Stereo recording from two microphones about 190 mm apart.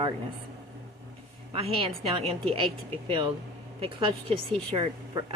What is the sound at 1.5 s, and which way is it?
Speech, 30° right (ahead or behind).